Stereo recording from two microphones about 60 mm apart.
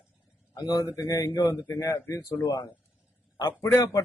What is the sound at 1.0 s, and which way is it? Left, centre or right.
Speech, left.